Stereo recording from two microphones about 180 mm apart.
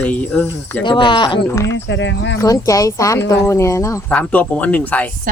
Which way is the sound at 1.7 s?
85° left.